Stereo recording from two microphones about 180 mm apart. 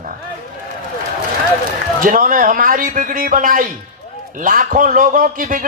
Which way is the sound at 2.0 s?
50° right (ahead or behind).